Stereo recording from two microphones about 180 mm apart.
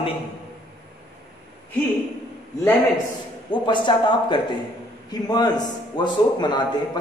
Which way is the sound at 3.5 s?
25° left (ahead or behind).